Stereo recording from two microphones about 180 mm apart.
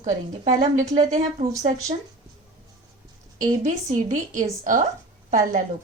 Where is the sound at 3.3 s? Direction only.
45° right (ahead or behind).